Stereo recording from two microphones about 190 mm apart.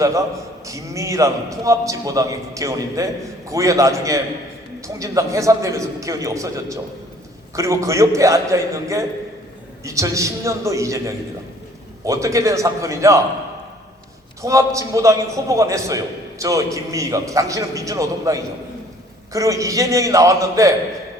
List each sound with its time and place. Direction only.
0.0 s a man's voice: 15° right (ahead or behind)
14.4 s a man's voice: 15° right (ahead or behind)